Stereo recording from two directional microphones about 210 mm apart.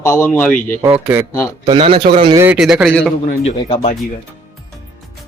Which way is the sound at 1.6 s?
25° right (ahead or behind).